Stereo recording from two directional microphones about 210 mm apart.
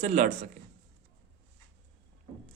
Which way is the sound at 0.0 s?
35° right (ahead or behind).